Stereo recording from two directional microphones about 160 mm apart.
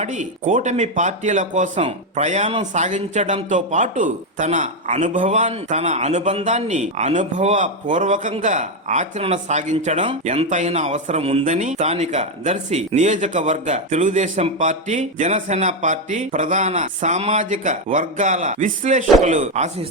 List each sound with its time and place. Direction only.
0.0 s speech: 50° right (ahead or behind)